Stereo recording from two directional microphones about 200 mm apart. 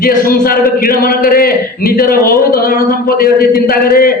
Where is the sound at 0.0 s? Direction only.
45° left (ahead or behind).